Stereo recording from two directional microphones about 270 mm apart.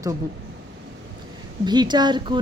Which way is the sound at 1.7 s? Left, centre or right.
Centre.